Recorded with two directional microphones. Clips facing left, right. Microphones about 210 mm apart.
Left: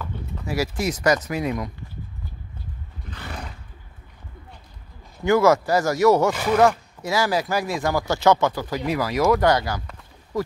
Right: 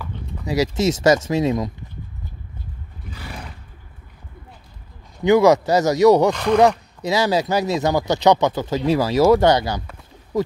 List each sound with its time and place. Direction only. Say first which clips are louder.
0.5 s speech: right 5 dB; 20° right (ahead or behind)
3.1 s roar: even; 10° right (ahead or behind)
5.2 s speech: right 4 dB; 15° right (ahead or behind)
6.3 s speech: right 3 dB; 5° left (ahead or behind)
7.0 s speech: right 4 dB; 20° right (ahead or behind)